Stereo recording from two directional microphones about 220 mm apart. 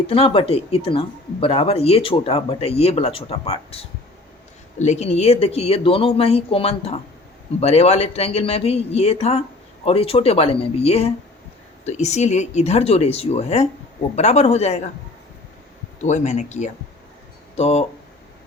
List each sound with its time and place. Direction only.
0.1 s speech: 25° left (ahead or behind)
16.0 s speech: 35° left (ahead or behind)